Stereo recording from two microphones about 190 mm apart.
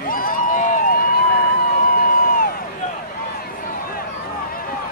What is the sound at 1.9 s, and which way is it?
Crowd, 50° left (ahead or behind).